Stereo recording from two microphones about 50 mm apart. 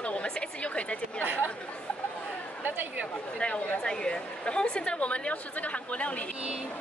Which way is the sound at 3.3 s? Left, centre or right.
Left.